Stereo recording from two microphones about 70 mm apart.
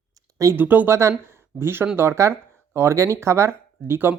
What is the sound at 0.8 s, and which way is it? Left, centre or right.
Speech, right.